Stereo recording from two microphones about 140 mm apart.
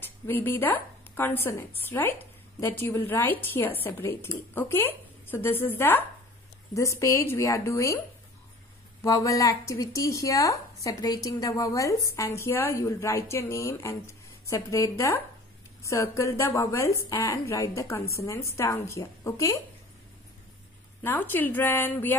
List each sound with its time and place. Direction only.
0.0 s a woman's voice: 15° left (ahead or behind)
9.0 s speech: 25° left (ahead or behind)
21.0 s a woman's voice: 15° left (ahead or behind)